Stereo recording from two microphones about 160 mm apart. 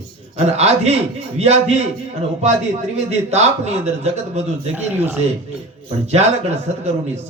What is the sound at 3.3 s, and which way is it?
A man's voice, 45° right (ahead or behind).